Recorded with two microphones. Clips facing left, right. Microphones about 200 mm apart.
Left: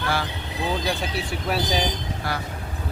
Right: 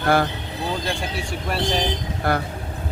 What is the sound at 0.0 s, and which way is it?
Speech, 50° right (ahead or behind).